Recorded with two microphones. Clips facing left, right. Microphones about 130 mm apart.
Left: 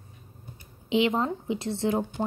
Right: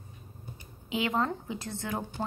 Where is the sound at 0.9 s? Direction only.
25° left (ahead or behind).